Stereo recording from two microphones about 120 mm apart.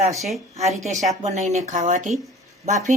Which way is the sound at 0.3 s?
65° right (ahead or behind).